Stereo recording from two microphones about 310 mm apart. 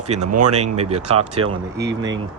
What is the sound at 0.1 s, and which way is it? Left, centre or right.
Speech, right.